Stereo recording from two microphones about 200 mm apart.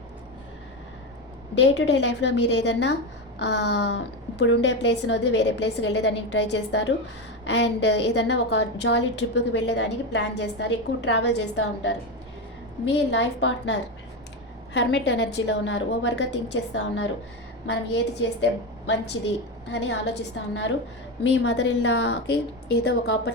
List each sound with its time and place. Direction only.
1.5 s a woman's voice: 60° left (ahead or behind)
13.1 s a woman's voice: 60° left (ahead or behind)
19.1 s a woman's voice: 70° left (ahead or behind); by 23.3 s 55° left (ahead or behind)